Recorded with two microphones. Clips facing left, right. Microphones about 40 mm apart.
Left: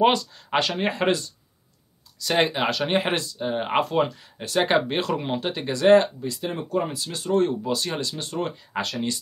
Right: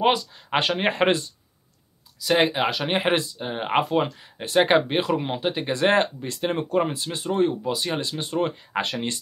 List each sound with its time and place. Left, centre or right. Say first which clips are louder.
0.0 s speech: left 1 dB; centre
0.6 s speech: right 2 dB; right
2.1 s speech: right 2 dB; centre
4.2 s speech: right 3 dB; right
5.7 s speech: left 4 dB; right
6.2 s speech: right 3 dB; right; by 8.0 s centre
8.0 s speech: right 3 dB; right